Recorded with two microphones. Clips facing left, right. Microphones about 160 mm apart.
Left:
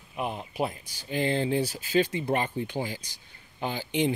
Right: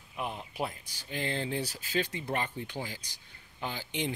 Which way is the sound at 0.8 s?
5° left (ahead or behind).